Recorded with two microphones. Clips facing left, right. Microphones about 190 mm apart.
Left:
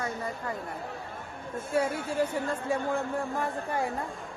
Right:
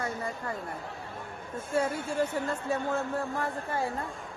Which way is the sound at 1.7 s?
10° left (ahead or behind).